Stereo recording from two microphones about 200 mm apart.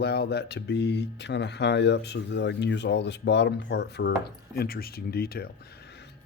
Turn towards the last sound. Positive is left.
turn(degrees=50)  # may be behind; listen again after turning